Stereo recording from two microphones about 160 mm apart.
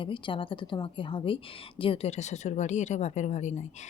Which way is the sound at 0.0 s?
30° left (ahead or behind).